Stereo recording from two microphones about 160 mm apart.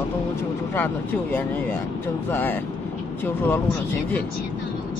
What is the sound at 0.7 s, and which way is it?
Speech, 10° left (ahead or behind).